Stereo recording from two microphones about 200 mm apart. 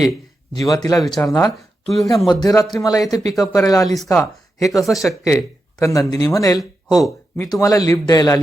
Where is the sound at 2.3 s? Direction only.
20° left (ahead or behind).